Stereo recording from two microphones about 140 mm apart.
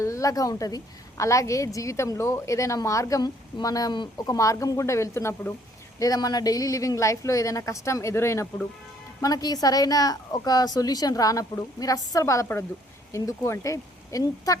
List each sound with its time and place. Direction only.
0.0 s a woman's voice: 25° left (ahead or behind)